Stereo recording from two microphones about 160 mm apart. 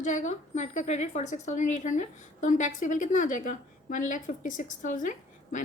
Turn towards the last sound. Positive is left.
turn(degrees=50)  # may be behind; listen again after turning